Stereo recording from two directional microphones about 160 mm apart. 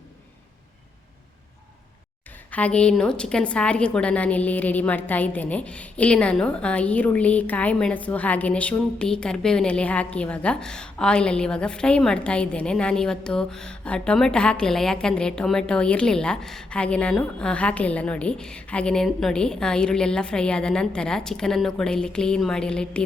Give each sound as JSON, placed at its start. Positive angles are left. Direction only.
{"t": 2.5, "sound": "a woman's voice", "side_deg": 10}